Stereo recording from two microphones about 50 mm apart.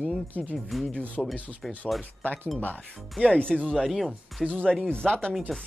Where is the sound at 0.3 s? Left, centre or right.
Left.